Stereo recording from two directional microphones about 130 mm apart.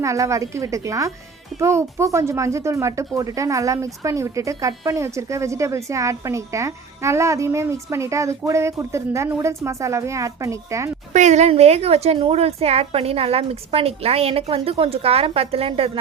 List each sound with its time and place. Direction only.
0.0 s speech: 25° right (ahead or behind)
11.1 s a woman's voice: 65° right (ahead or behind); by 15.9 s 45° right (ahead or behind)